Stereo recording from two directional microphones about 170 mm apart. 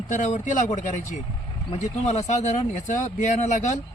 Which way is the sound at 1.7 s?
40° left (ahead or behind).